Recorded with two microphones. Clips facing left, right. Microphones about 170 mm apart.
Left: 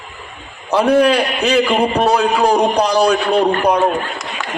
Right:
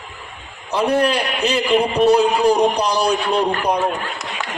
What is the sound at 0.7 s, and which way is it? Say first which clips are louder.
A man's voice: left 5 dB; 75° left (ahead or behind).